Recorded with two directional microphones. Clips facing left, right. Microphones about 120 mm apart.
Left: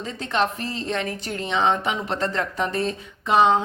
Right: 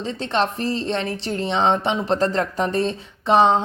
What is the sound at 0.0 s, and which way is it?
A woman's voice, 35° right (ahead or behind).